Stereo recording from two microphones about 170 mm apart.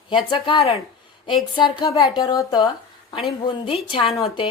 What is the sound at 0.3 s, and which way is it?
A woman's voice, 30° left (ahead or behind).